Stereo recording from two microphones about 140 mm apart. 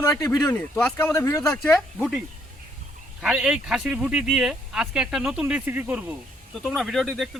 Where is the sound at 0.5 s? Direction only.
10° left (ahead or behind).